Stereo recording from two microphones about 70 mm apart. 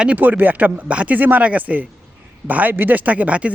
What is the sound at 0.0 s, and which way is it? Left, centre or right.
A man's voice, right.